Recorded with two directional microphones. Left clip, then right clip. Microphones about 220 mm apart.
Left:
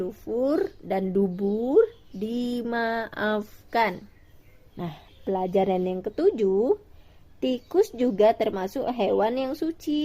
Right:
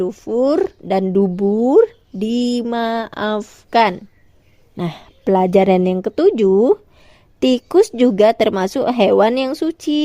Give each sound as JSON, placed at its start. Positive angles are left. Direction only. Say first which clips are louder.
{"t": 0.0, "sound": "speech", "louder": "right 10 dB", "side_deg": -35}
{"t": 4.8, "sound": "speech", "louder": "right 11 dB", "side_deg": -50}